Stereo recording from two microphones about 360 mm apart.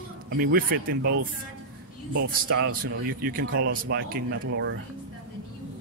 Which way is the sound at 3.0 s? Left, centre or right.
Right.